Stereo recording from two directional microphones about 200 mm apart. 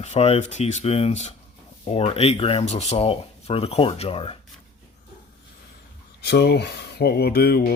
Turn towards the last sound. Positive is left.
turn(degrees=50)  # may be behind; listen again after turning